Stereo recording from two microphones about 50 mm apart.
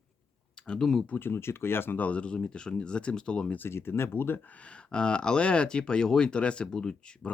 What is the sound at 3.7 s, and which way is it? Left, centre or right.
Speech, left.